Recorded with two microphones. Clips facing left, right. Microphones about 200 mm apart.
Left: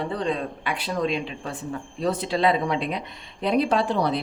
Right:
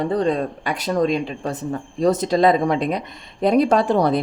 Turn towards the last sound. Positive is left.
turn(degrees=-45)  # may be behind; listen again after turning